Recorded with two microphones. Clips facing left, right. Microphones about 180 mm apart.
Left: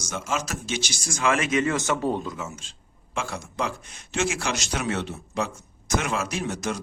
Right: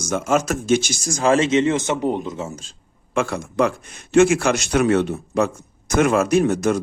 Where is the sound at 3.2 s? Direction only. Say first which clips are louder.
Right 10 dB; 60° right (ahead or behind).